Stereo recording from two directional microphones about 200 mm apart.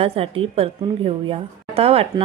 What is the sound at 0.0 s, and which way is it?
A woman's voice, 30° right (ahead or behind).